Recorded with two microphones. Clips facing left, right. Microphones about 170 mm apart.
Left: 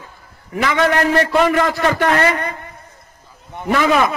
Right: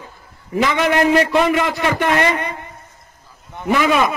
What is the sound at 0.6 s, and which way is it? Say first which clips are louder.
A man's voice: even; 20° right (ahead or behind).